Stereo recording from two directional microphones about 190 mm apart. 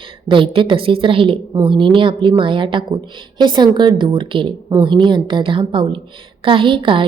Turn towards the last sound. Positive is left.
turn(degrees=-25)  # may be behind; listen again after turning